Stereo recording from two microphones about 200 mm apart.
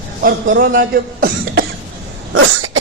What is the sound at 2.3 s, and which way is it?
Cough, 90° right.